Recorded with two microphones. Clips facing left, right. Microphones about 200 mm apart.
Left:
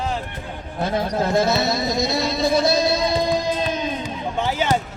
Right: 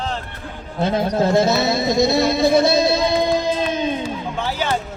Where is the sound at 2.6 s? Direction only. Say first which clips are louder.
Right 3 dB; 25° right (ahead or behind).